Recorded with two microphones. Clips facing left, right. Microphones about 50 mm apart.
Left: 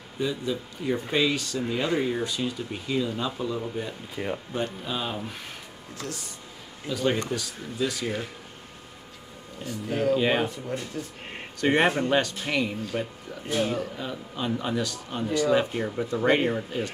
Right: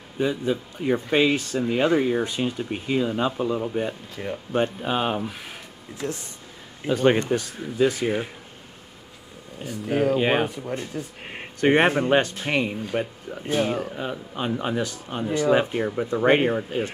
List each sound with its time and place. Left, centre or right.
0.2 s speech: right
4.1 s speech: centre
4.8 s speech: right
5.9 s speech: right
9.6 s speech: centre
10.1 s speech: right
13.9 s speech: right